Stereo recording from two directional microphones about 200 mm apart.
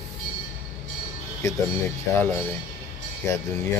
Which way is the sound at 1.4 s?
15° left (ahead or behind).